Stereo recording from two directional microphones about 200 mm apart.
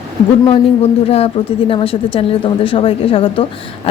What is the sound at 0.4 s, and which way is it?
Speech, 30° left (ahead or behind).